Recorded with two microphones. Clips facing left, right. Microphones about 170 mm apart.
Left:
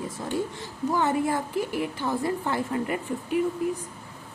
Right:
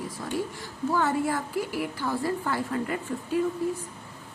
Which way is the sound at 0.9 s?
20° left (ahead or behind).